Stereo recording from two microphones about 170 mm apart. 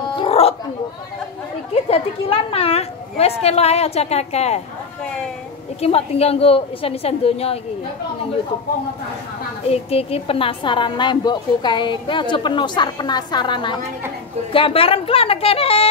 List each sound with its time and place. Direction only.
0.1 s a sound: 35° left (ahead or behind)
1.7 s a woman's voice: 35° left (ahead or behind)
5.8 s a woman's voice: 35° left (ahead or behind)
9.7 s a woman's voice: 35° left (ahead or behind)